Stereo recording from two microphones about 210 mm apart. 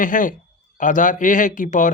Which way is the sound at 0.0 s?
40° left (ahead or behind).